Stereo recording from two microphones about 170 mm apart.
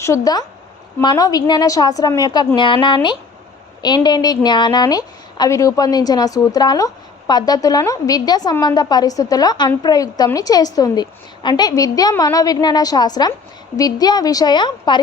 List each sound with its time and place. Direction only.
0.0 s a woman's voice: 20° left (ahead or behind)